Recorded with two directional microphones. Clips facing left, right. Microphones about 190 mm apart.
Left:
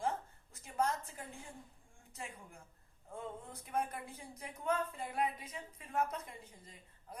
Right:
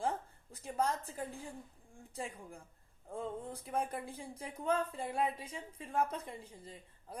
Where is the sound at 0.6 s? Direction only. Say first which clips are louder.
Right 1 dB; 35° right (ahead or behind).